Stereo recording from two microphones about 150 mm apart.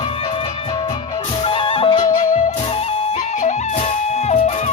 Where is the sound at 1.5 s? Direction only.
35° left (ahead or behind).